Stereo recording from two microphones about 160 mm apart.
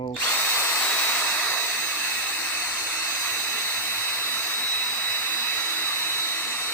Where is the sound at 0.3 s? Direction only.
15° left (ahead or behind).